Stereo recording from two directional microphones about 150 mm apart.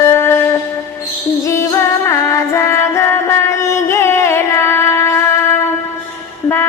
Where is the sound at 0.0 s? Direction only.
15° left (ahead or behind).